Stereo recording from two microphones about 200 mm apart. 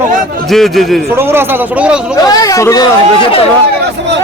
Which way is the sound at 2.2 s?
20° left (ahead or behind).